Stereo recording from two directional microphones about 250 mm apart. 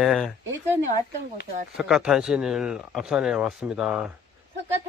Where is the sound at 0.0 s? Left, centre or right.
Centre.